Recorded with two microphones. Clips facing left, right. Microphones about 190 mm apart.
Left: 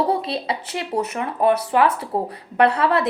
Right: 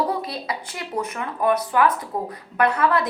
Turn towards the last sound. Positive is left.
turn(degrees=30)  # may be behind; listen again after turning